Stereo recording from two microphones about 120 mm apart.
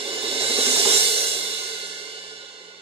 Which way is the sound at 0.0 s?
50° right (ahead or behind).